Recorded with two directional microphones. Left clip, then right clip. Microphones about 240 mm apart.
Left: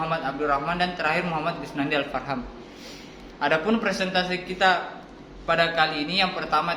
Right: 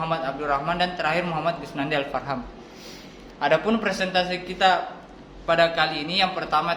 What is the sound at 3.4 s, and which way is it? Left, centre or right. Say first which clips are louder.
A man's voice: right 2 dB; centre.